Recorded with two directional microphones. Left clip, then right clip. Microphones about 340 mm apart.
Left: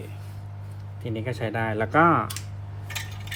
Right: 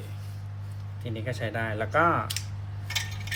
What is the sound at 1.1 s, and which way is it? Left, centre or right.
Speech, centre.